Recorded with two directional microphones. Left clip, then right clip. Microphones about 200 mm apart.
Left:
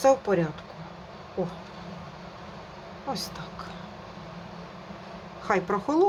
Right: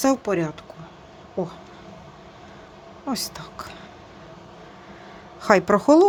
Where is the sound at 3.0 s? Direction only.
55° right (ahead or behind).